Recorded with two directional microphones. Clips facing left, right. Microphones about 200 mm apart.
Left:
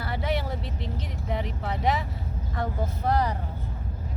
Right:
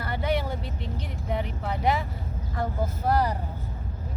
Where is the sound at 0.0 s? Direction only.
Centre (ahead or behind).